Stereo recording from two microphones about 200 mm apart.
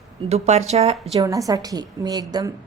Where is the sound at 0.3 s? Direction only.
35° right (ahead or behind).